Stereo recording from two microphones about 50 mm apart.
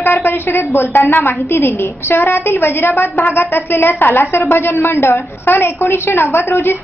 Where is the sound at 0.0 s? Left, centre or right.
Left.